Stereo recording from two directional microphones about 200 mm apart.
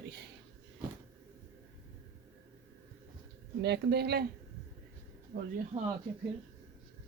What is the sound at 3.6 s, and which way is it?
Speech, 55° right (ahead or behind).